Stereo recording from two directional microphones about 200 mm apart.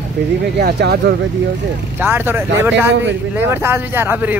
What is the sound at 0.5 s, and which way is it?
Speech, 55° right (ahead or behind).